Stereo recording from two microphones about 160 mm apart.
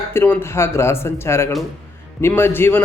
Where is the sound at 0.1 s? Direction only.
15° left (ahead or behind).